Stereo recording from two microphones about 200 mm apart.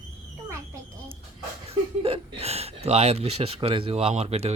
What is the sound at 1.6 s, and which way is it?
Speech, 30° right (ahead or behind).